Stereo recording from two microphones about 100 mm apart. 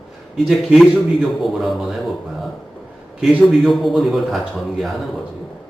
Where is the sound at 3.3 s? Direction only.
Centre (ahead or behind).